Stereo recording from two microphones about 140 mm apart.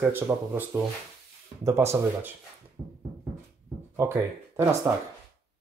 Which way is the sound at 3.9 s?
20° right (ahead or behind).